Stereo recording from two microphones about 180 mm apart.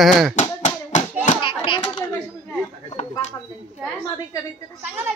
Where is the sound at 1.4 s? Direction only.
25° left (ahead or behind).